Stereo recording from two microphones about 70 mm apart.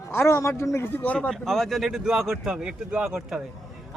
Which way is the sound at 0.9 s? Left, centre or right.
Left.